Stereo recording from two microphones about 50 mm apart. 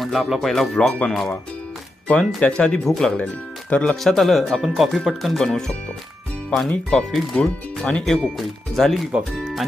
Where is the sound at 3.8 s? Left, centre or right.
Centre.